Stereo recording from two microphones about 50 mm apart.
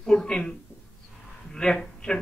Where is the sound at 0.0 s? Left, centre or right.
Centre.